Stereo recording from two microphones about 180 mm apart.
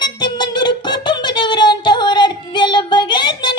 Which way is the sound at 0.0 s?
25° left (ahead or behind).